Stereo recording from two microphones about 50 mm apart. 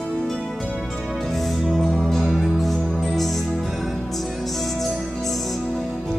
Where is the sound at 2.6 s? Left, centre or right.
Centre.